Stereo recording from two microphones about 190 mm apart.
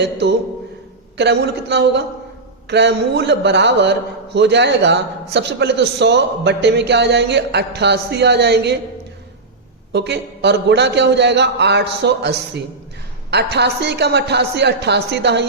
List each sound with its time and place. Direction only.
0.0 s a man's voice: 65° right (ahead or behind)
9.9 s a man's voice: 65° right (ahead or behind)